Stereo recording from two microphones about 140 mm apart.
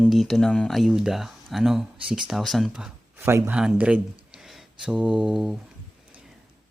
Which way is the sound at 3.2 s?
20° right (ahead or behind).